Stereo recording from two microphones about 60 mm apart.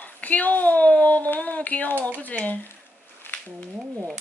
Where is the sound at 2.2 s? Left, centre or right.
Left.